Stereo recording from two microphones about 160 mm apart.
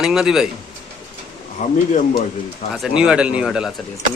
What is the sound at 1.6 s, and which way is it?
Speech, 45° left (ahead or behind).